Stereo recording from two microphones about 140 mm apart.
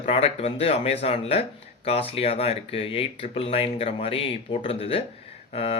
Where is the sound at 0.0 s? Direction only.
45° left (ahead or behind).